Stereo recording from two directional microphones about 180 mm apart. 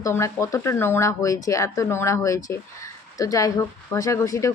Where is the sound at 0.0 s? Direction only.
15° left (ahead or behind).